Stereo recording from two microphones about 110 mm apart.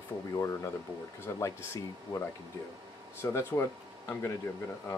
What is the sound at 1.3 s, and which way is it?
Speech, 30° left (ahead or behind).